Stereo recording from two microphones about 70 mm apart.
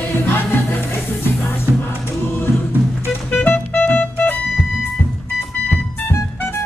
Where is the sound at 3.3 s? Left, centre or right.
Left.